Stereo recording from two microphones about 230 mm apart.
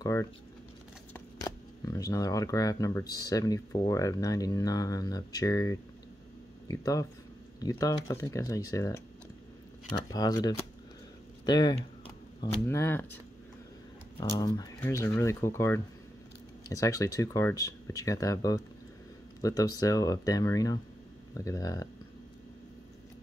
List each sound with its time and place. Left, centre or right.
0.0 s speech: centre
10.1 s speech: centre
14.4 s speech: centre